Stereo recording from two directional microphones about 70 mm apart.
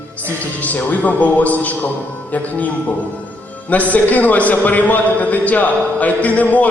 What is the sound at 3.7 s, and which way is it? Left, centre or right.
A man's voice, left.